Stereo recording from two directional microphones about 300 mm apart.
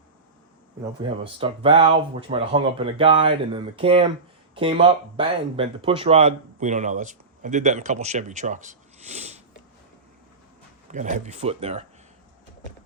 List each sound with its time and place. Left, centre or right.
1.2 s speech: centre
10.9 s speech: right